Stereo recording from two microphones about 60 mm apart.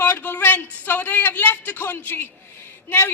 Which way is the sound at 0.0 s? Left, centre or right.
Left.